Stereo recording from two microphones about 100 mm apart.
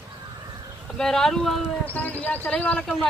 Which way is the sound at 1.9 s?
15° left (ahead or behind).